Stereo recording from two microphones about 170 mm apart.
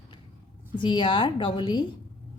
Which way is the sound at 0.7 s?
30° left (ahead or behind).